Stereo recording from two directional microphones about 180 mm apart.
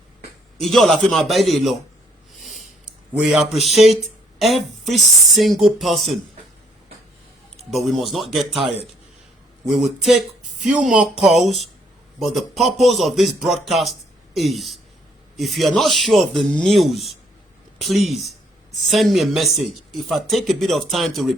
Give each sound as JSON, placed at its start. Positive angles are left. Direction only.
{"t": 0.6, "sound": "speech", "side_deg": 0}
{"t": 2.4, "sound": "a sound", "side_deg": 0}
{"t": 4.4, "sound": "speech", "side_deg": 0}
{"t": 7.5, "sound": "speech", "side_deg": 0}
{"t": 9.7, "sound": "speech", "side_deg": -5}